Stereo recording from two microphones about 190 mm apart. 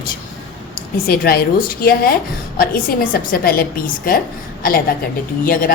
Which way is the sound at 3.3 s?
50° left (ahead or behind).